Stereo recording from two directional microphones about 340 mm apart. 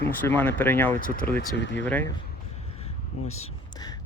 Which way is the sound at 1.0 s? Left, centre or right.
Left.